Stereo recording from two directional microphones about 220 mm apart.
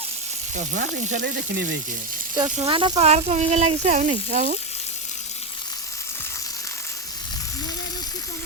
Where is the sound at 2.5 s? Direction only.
30° right (ahead or behind).